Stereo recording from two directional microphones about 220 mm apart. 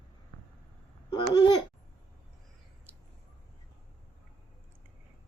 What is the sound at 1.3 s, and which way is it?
Babbling, 20° left (ahead or behind).